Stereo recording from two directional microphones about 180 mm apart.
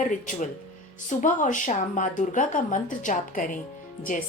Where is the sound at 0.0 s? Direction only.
45° left (ahead or behind).